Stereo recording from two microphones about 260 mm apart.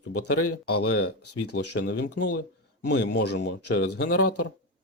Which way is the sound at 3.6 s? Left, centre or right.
Left.